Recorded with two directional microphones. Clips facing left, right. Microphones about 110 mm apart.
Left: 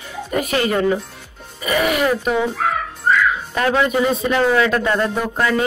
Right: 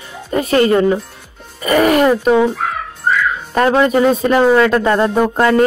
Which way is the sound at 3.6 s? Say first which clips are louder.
Right 6 dB; 35° right (ahead or behind).